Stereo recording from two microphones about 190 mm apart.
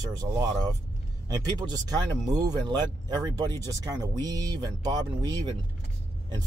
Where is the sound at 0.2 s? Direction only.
20° right (ahead or behind).